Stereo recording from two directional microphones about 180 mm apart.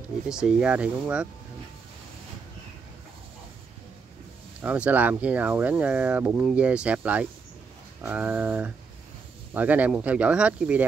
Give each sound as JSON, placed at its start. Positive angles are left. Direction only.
{"t": 0.3, "sound": "speech", "side_deg": -5}
{"t": 4.6, "sound": "speech", "side_deg": -5}